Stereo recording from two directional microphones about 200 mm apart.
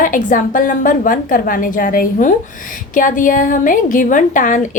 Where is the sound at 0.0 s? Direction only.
40° left (ahead or behind).